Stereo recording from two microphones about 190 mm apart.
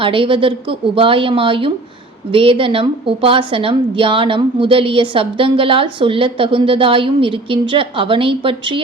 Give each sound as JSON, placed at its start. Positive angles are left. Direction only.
{"t": 0.0, "sound": "a woman's voice", "side_deg": -25}